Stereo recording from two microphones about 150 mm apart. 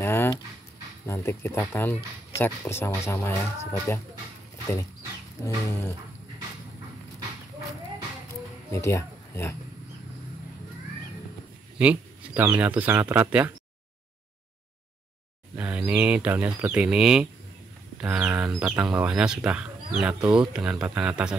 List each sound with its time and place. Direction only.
0.0 s a sound: 15° left (ahead or behind)
1.0 s speech: 15° left (ahead or behind)
5.4 s speech: 15° left (ahead or behind)
8.7 s speech: 20° left (ahead or behind)
11.8 s speech: 10° right (ahead or behind)
15.5 s speech: 10° right (ahead or behind)